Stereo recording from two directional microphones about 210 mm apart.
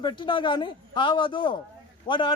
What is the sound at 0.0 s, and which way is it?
A man's voice, 20° left (ahead or behind).